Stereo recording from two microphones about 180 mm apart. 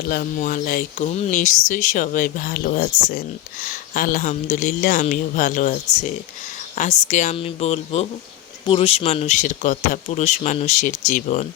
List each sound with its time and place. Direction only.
0.1 s speech: 50° left (ahead or behind)